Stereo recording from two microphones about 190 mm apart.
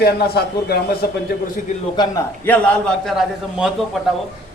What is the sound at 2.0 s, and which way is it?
A man's voice, 15° left (ahead or behind).